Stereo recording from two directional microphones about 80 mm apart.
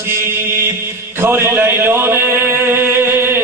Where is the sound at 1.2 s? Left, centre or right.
Right.